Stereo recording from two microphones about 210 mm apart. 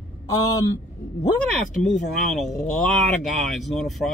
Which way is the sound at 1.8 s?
Centre (ahead or behind).